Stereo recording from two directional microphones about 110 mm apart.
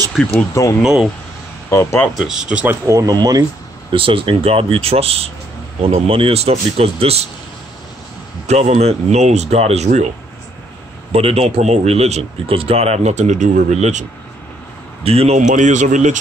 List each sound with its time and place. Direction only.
0.1 s speech: 10° left (ahead or behind)
1.7 s speech: 25° left (ahead or behind)
2.1 s speech: 5° right (ahead or behind)
2.6 s speech: 20° right (ahead or behind)
3.0 s speech: 35° right (ahead or behind)
3.9 s speech: 55° right (ahead or behind)
8.5 s speech: 80° right
11.1 s a man's voice: 65° right (ahead or behind); by 14.0 s 90° right
15.0 s speech: 70° right (ahead or behind); by 16.2 s 90° right